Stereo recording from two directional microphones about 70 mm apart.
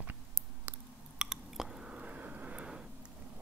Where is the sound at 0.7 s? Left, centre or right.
Right.